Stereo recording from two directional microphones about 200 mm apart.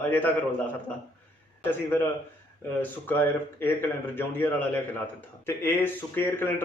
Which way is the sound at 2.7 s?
10° left (ahead or behind).